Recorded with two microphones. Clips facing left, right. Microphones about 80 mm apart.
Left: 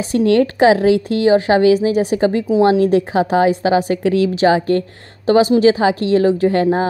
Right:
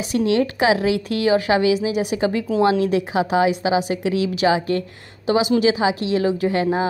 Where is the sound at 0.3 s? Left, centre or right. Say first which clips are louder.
Left 7 dB; left.